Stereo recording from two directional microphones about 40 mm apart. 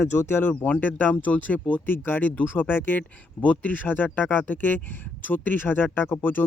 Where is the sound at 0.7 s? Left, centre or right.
Left.